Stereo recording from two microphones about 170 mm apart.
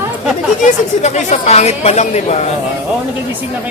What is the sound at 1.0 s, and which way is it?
Speech, 45° left (ahead or behind).